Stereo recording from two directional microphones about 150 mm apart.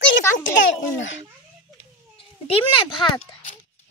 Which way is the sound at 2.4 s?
40° left (ahead or behind).